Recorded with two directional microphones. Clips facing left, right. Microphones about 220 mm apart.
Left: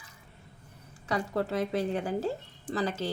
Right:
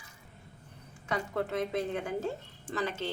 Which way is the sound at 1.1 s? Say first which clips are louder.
Left 3 dB; 35° left (ahead or behind).